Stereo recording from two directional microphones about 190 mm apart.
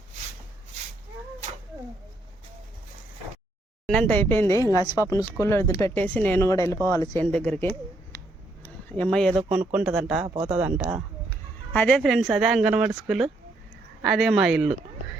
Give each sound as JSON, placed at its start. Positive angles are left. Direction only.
{"t": 3.8, "sound": "speech", "side_deg": 5}
{"t": 7.3, "sound": "speech", "side_deg": 5}
{"t": 8.6, "sound": "a sound", "side_deg": 5}
{"t": 9.4, "sound": "speech", "side_deg": -5}
{"t": 10.2, "sound": "speech", "side_deg": -25}
{"t": 10.5, "sound": "speech", "side_deg": -5}
{"t": 11.3, "sound": "speech", "side_deg": 10}